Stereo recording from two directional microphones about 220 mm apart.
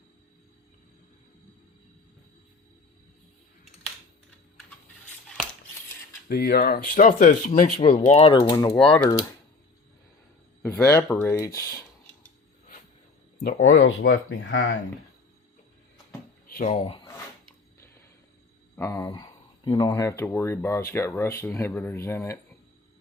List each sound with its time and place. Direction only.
6.2 s speech: 45° left (ahead or behind); by 8.7 s 20° left (ahead or behind)
8.7 s speech: 5° left (ahead or behind)
10.6 s speech: 10° left (ahead or behind)
13.6 s speech: 60° left (ahead or behind)
16.6 s speech: 30° left (ahead or behind)
18.8 s speech: 15° left (ahead or behind)